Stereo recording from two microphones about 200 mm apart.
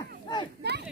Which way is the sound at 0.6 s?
55° right (ahead or behind).